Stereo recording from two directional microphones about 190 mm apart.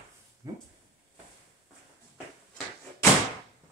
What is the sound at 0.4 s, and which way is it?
Speech, 20° right (ahead or behind).